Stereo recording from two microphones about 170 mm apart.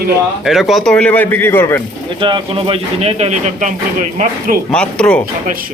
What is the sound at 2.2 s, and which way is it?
Speech, 30° right (ahead or behind).